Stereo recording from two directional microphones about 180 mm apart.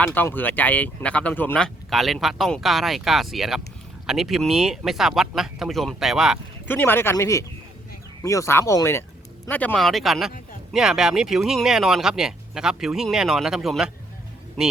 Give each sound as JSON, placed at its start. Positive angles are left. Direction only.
{"t": 0.0, "sound": "speech", "side_deg": 10}
{"t": 6.7, "sound": "speech", "side_deg": 10}